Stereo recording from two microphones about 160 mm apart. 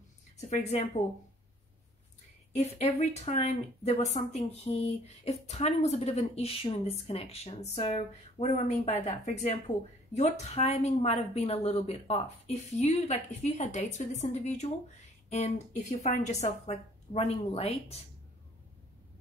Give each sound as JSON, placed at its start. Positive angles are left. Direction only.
{"t": 0.4, "sound": "a woman's voice", "side_deg": 45}
{"t": 2.5, "sound": "speech", "side_deg": 45}